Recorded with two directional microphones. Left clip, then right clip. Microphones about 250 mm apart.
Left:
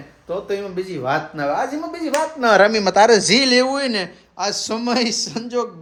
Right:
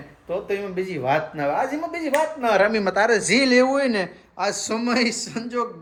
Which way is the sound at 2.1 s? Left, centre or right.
Left.